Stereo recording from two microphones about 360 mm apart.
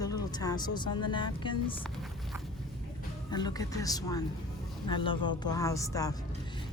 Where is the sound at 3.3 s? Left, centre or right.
Centre.